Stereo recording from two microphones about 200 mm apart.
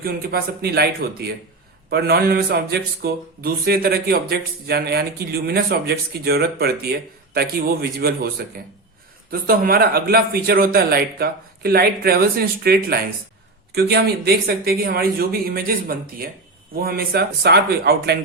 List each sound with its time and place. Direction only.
0.0 s a man's voice: 50° right (ahead or behind)